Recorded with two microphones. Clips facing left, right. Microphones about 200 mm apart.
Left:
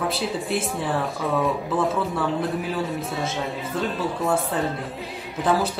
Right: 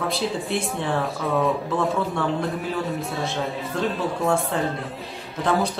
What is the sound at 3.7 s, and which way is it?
Speech, centre (ahead or behind).